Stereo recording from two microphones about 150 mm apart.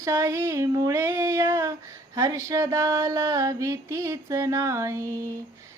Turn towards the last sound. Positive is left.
turn(degrees=-20)  # may be behind; listen again after turning